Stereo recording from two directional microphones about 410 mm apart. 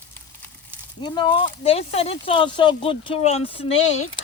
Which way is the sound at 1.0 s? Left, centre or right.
Centre.